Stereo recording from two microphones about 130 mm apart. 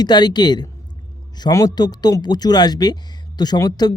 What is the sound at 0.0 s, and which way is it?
Speech, 30° left (ahead or behind).